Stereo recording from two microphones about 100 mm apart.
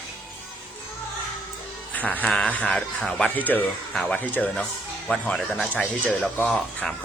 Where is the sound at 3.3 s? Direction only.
15° left (ahead or behind).